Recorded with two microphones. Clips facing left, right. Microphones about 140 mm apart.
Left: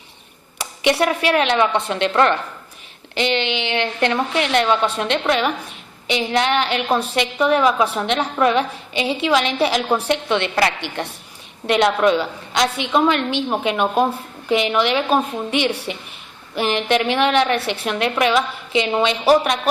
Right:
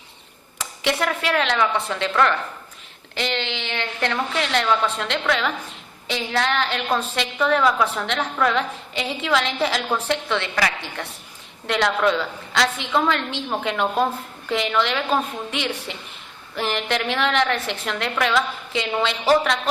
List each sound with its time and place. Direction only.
0.6 s a woman's voice: 15° left (ahead or behind)
11.7 s a woman's voice: 20° left (ahead or behind)